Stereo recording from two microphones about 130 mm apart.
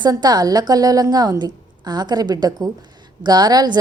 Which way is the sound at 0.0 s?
30° right (ahead or behind).